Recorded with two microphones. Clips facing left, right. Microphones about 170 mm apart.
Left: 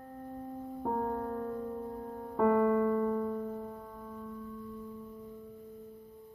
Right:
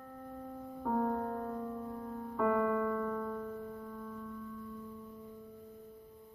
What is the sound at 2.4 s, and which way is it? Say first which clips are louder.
Music: left 5 dB; 35° left (ahead or behind).